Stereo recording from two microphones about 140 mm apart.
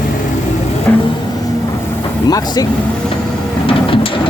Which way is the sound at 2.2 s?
25° left (ahead or behind).